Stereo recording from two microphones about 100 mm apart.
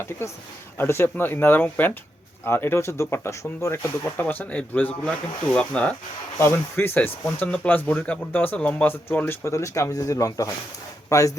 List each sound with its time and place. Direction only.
0.2 s speech: 25° left (ahead or behind)
6.4 s speech: 25° left (ahead or behind)